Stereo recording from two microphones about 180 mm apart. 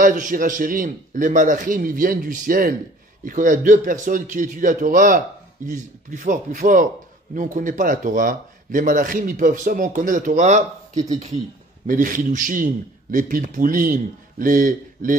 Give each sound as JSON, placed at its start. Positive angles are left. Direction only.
{"t": 0.0, "sound": "speech", "side_deg": -50}